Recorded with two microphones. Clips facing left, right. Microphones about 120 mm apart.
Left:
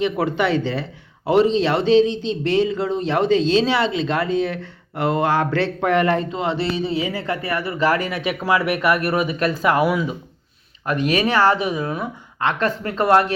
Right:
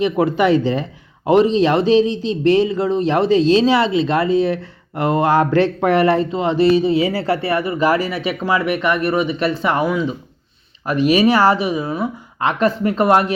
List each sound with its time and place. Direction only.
0.3 s speech: 10° right (ahead or behind)
7.0 s speech: 35° right (ahead or behind)
7.8 s speech: 15° right (ahead or behind)
8.0 s speech: centre (ahead or behind)
10.8 s speech: 10° right (ahead or behind)